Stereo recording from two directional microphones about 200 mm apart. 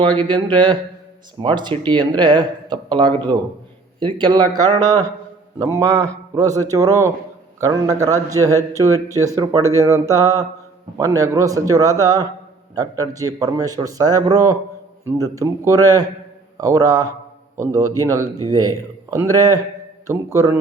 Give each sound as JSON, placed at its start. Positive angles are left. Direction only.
{"t": 0.0, "sound": "a man's voice", "side_deg": -25}